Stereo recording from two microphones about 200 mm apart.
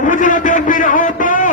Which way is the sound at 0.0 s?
40° left (ahead or behind).